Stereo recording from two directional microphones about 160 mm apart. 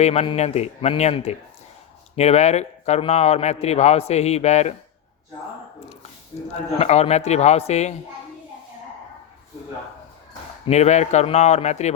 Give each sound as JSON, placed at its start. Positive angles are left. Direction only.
{"t": 0.0, "sound": "a man's voice", "side_deg": 40}
{"t": 6.3, "sound": "a man's voice", "side_deg": 35}
{"t": 10.7, "sound": "a man's voice", "side_deg": 45}